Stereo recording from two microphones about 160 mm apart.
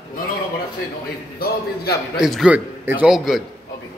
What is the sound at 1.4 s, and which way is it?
Speech, 75° left (ahead or behind).